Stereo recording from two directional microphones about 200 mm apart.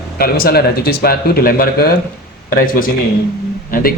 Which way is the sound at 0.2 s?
50° left (ahead or behind).